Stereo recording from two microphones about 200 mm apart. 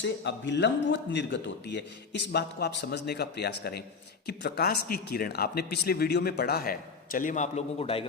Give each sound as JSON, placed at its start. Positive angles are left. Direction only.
{"t": 0.0, "sound": "a man's voice", "side_deg": 60}